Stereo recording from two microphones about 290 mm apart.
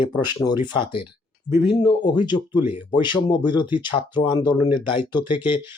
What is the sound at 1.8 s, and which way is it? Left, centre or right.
Speech, centre.